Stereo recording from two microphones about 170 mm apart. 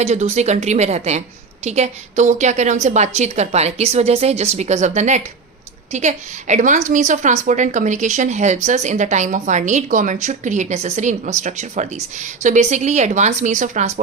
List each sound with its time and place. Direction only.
0.0 s a woman's voice: 40° right (ahead or behind)